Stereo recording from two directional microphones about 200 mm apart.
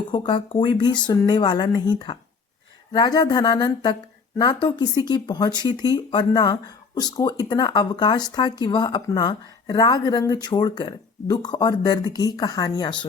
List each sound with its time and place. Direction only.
0.1 s speech: 25° left (ahead or behind)